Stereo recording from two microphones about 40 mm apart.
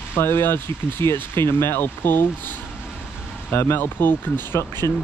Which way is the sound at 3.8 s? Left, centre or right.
Left.